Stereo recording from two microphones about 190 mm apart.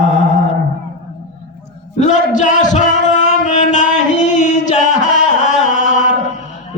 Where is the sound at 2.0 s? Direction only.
40° left (ahead or behind).